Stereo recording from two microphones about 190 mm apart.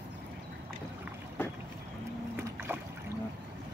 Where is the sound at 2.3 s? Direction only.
10° right (ahead or behind).